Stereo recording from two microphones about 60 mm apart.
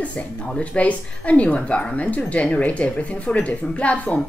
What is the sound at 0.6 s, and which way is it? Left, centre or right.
Speech, left.